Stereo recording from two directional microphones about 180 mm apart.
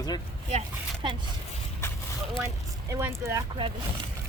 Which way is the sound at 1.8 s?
15° left (ahead or behind).